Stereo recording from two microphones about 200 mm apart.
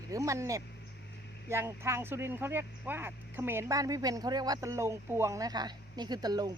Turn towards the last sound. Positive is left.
turn(degrees=-20)  # may be behind; listen again after turning